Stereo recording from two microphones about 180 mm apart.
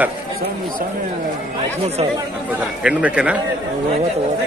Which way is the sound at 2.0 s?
30° right (ahead or behind).